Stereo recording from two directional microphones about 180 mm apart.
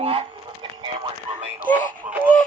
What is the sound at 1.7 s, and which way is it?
Radio, 10° right (ahead or behind).